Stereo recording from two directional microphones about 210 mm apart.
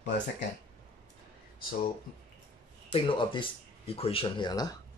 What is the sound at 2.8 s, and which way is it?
Speech, 25° left (ahead or behind).